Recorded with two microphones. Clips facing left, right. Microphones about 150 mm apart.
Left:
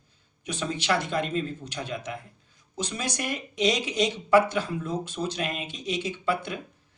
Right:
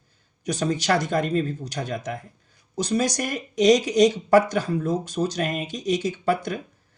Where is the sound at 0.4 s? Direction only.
40° right (ahead or behind).